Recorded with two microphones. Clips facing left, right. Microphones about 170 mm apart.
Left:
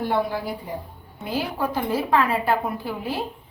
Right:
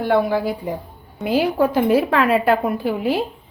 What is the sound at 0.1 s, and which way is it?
Speech, 90° right.